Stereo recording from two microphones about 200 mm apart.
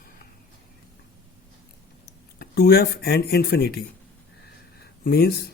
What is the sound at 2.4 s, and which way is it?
Speech, 50° left (ahead or behind).